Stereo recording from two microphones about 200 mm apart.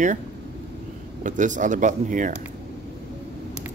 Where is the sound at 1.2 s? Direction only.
40° right (ahead or behind).